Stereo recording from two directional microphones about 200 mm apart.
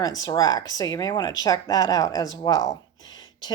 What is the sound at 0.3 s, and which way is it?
Speech, 20° left (ahead or behind).